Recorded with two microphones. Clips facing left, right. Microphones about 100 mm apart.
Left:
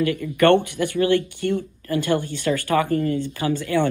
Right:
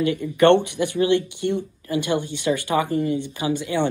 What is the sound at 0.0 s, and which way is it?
Speech, 20° right (ahead or behind).